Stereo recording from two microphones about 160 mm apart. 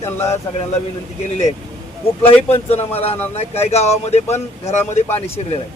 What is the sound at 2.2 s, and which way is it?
Speech, 40° left (ahead or behind).